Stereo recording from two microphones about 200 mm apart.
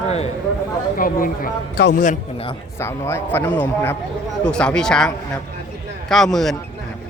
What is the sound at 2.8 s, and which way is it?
A man's voice, 15° left (ahead or behind).